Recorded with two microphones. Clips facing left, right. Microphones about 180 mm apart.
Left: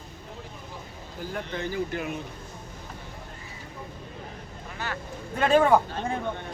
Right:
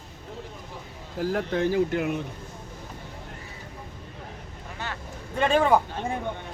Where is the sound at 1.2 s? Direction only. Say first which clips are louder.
Right 8 dB; 85° right; by 2.2 s 70° right (ahead or behind).